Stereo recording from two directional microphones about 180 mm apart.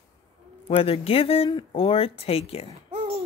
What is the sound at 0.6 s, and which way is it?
Speech, 30° left (ahead or behind).